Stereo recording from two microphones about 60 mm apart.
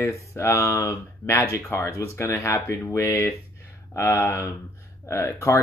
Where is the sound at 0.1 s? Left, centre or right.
Left.